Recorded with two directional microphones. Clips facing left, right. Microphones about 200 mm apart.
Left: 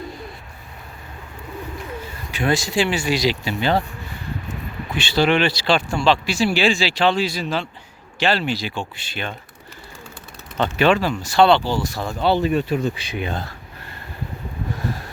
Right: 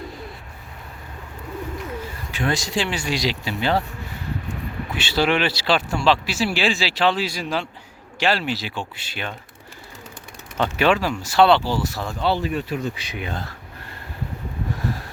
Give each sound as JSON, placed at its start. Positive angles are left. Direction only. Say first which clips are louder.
{"t": 2.3, "sound": "speech", "louder": "left 3 dB", "side_deg": 10}
{"t": 4.9, "sound": "speech", "louder": "left 3 dB", "side_deg": -5}
{"t": 10.6, "sound": "speech", "louder": "left 2 dB", "side_deg": -5}
{"t": 12.4, "sound": "speech", "louder": "left 5 dB", "side_deg": 25}